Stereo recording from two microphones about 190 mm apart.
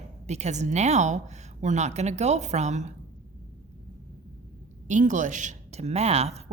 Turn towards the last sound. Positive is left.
turn(degrees=-35)  # may be behind; listen again after turning